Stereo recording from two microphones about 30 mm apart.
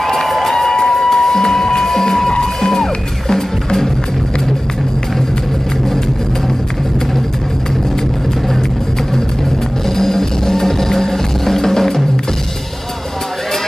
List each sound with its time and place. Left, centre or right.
0.0 s a sound: centre
0.8 s music: centre
9.8 s music: centre